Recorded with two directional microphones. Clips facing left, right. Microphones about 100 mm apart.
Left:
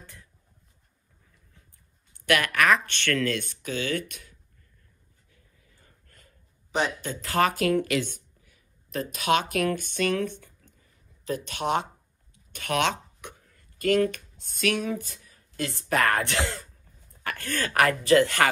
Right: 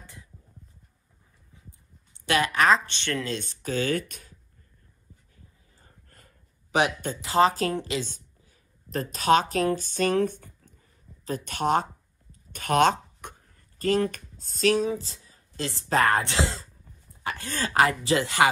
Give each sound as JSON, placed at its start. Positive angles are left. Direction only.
{"t": 0.0, "sound": "a sound", "side_deg": -15}
{"t": 1.5, "sound": "heart sounds", "side_deg": -20}
{"t": 3.6, "sound": "speech", "side_deg": -40}
{"t": 5.3, "sound": "dog", "side_deg": -35}
{"t": 6.7, "sound": "speech", "side_deg": -60}
{"t": 7.2, "sound": "speech", "side_deg": -20}
{"t": 8.5, "sound": "speech", "side_deg": -40}
{"t": 9.8, "sound": "a sound", "side_deg": -35}
{"t": 14.9, "sound": "speech", "side_deg": -25}